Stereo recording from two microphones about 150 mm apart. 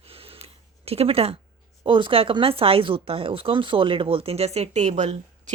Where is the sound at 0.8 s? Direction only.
40° right (ahead or behind).